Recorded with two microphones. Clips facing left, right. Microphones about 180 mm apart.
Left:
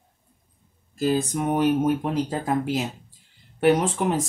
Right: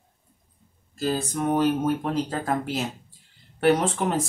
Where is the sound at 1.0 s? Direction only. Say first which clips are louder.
Left 3 dB; 15° left (ahead or behind).